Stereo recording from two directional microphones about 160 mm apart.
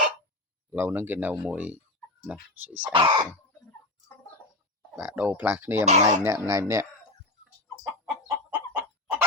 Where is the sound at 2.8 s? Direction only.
30° right (ahead or behind).